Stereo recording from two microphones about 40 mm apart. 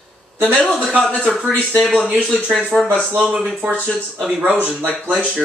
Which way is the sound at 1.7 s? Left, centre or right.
Centre.